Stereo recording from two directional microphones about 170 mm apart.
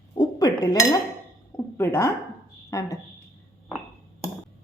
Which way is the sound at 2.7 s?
20° left (ahead or behind).